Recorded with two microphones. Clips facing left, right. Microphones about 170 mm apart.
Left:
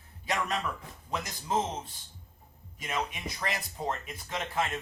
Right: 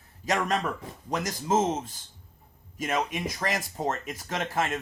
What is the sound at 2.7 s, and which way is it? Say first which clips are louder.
Speech: right 6 dB; 45° right (ahead or behind).